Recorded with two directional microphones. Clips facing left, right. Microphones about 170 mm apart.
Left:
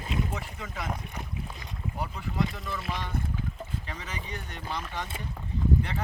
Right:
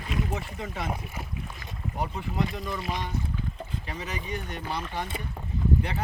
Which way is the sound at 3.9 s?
15° right (ahead or behind).